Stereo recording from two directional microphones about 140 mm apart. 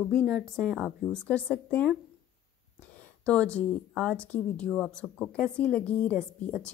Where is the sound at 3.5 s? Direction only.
10° left (ahead or behind).